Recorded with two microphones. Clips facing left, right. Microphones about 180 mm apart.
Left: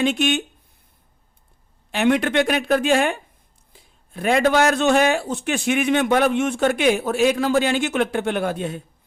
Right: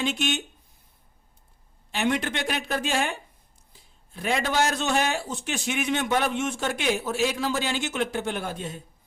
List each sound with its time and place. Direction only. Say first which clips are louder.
0.0 s speech: left 7 dB; 55° left (ahead or behind)
1.9 s speech: left 7 dB; 60° left (ahead or behind)